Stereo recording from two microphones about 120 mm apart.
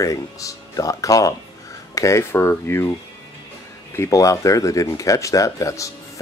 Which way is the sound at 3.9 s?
25° left (ahead or behind).